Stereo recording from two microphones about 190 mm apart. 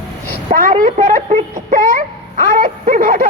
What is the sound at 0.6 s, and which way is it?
Speech, 45° right (ahead or behind).